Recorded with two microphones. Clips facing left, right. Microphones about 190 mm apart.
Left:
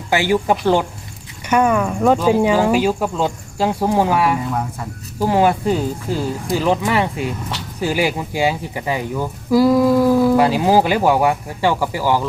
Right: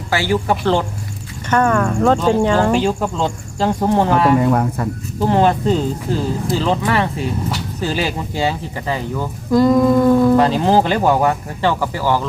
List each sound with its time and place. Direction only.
0.1 s speech: 15° left (ahead or behind)
4.4 s speech: 70° right (ahead or behind)
5.2 s speech: 10° left (ahead or behind)